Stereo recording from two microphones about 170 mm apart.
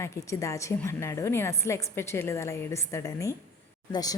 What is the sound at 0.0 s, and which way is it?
A woman's voice, 15° left (ahead or behind).